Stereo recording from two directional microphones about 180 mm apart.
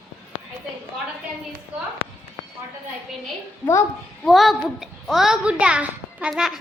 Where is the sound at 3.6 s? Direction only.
15° left (ahead or behind).